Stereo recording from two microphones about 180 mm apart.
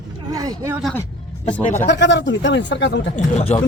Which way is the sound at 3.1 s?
40° left (ahead or behind).